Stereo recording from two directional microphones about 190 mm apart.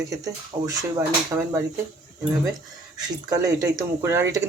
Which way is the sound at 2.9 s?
20° right (ahead or behind).